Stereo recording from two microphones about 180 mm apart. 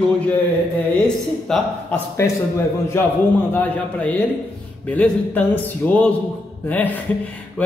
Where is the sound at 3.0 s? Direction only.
15° left (ahead or behind).